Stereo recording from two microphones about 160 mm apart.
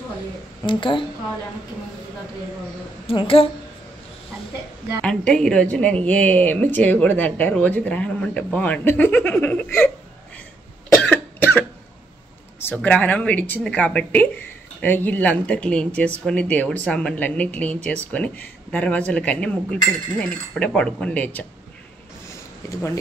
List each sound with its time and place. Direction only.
0.7 s speech: 30° left (ahead or behind)
3.1 s speech: 35° left (ahead or behind)
5.0 s a woman's voice: 5° left (ahead or behind)
11.0 s cough: 10° left (ahead or behind)
12.5 s a woman's voice: 10° left (ahead or behind)
22.7 s speech: 15° left (ahead or behind)